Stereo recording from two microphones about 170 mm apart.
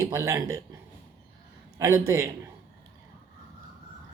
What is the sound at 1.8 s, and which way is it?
Speech, 15° right (ahead or behind).